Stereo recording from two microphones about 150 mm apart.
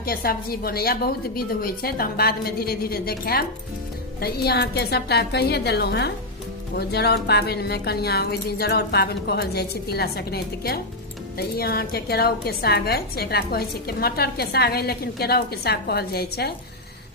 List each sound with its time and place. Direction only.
0.0 s a woman's voice: 85° left